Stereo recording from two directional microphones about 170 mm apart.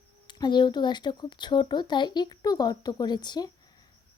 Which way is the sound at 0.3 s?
25° left (ahead or behind).